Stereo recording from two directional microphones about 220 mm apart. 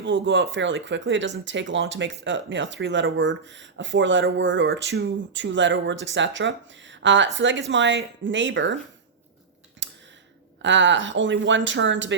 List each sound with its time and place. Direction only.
0.0 s speech: 55° right (ahead or behind)
9.8 s a sound: 55° right (ahead or behind)
10.6 s speech: 55° right (ahead or behind)